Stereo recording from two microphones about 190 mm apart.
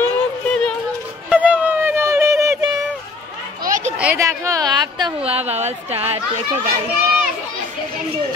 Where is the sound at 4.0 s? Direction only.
15° right (ahead or behind); by 6.2 s 35° right (ahead or behind).